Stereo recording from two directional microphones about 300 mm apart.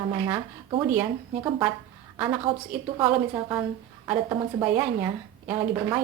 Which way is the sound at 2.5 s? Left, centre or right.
Centre.